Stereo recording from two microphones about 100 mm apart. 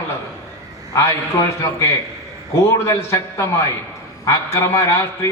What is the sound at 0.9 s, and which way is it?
Speech, 30° left (ahead or behind).